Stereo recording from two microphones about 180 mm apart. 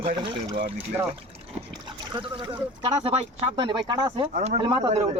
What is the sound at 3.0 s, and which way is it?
Speech, 35° right (ahead or behind).